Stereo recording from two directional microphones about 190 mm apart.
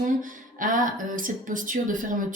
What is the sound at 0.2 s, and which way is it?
Speech, 45° right (ahead or behind).